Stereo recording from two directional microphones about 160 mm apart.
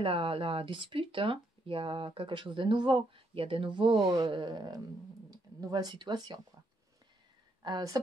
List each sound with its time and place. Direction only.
0.0 s speech: 35° right (ahead or behind)
7.6 s speech: 25° right (ahead or behind)